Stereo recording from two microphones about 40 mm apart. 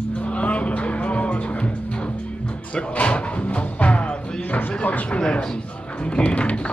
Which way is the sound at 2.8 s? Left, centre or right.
Left.